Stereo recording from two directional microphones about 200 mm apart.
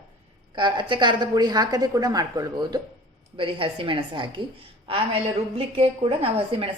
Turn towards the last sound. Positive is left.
turn(degrees=-30)  # may be behind; listen again after turning